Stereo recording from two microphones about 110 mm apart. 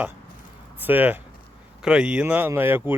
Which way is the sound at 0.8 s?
15° right (ahead or behind).